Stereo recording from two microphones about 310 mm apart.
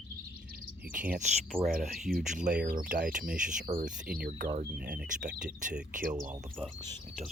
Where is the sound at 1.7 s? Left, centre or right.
Right.